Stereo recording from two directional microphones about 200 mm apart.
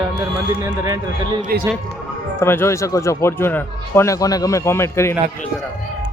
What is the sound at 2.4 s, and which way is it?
A man's voice, 10° left (ahead or behind).